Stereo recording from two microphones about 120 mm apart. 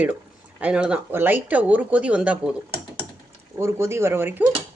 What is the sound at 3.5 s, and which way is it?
Speech, 20° right (ahead or behind).